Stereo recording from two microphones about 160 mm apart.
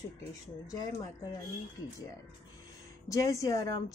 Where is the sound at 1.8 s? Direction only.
20° left (ahead or behind).